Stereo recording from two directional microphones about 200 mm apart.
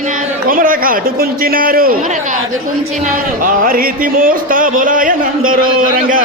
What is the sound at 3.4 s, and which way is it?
Speech, 45° right (ahead or behind).